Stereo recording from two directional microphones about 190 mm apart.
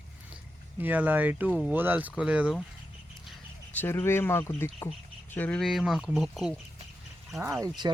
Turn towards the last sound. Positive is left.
turn(degrees=-20)  # may be behind; listen again after turning